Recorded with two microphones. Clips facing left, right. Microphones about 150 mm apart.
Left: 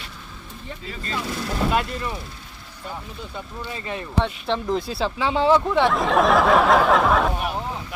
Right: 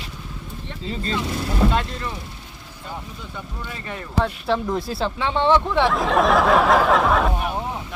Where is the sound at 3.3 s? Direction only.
20° left (ahead or behind).